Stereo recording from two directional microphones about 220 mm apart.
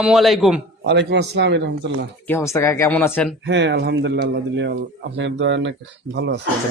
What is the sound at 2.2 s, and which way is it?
Speech, 10° left (ahead or behind).